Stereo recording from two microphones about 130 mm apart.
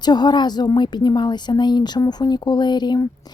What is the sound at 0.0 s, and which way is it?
A woman's voice, 35° left (ahead or behind).